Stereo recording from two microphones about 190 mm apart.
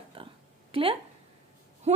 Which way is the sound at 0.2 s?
30° right (ahead or behind).